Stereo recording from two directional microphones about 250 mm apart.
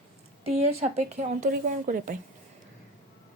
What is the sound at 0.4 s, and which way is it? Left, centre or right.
A woman's voice, right.